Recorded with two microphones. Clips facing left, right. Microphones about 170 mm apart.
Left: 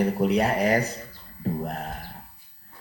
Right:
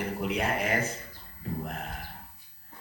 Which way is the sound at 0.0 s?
40° left (ahead or behind).